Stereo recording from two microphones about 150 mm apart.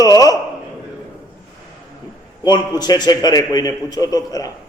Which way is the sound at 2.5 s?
25° left (ahead or behind).